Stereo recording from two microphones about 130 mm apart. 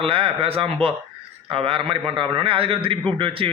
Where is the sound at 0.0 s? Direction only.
45° right (ahead or behind).